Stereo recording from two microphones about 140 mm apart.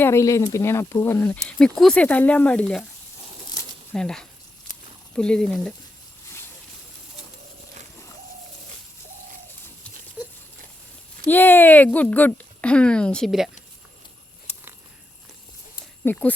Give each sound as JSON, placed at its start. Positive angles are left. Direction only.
{"t": 0.0, "sound": "speech", "side_deg": 20}
{"t": 3.9, "sound": "speech", "side_deg": 5}
{"t": 11.3, "sound": "speech", "side_deg": 15}
{"t": 14.5, "sound": "a sound", "side_deg": 50}
{"t": 16.0, "sound": "speech", "side_deg": 10}